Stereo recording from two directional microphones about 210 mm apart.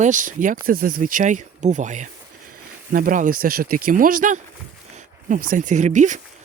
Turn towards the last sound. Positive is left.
turn(degrees=-35)  # may be behind; listen again after turning